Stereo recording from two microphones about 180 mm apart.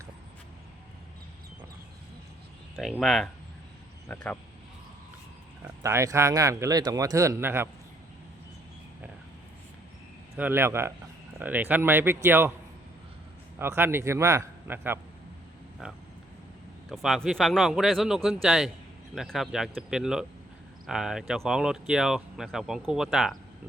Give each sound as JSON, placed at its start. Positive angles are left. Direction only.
{"t": 2.7, "sound": "speech", "side_deg": 0}
{"t": 5.8, "sound": "speech", "side_deg": -15}
{"t": 10.3, "sound": "speech", "side_deg": -10}
{"t": 13.6, "sound": "speech", "side_deg": -10}
{"t": 15.8, "sound": "speech", "side_deg": -5}